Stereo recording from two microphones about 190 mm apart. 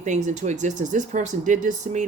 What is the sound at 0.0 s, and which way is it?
Speech, 40° right (ahead or behind).